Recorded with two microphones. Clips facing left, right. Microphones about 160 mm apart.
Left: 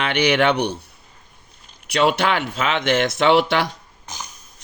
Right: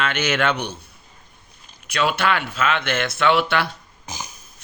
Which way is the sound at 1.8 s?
70° left (ahead or behind).